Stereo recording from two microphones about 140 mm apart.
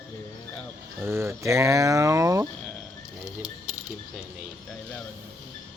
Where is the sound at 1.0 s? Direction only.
20° right (ahead or behind).